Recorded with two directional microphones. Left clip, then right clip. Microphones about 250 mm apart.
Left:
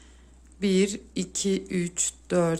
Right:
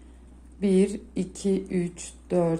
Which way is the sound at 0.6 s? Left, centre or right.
Left.